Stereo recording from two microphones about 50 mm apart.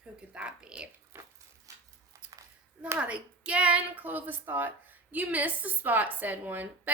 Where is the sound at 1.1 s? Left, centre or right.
Right.